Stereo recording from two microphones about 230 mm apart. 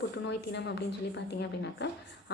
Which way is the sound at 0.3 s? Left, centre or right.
Left.